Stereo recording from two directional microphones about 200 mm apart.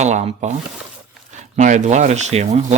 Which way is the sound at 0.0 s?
35° right (ahead or behind).